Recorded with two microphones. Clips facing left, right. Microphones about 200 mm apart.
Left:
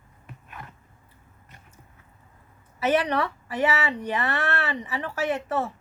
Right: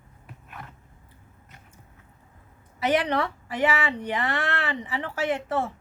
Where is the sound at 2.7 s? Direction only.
15° right (ahead or behind).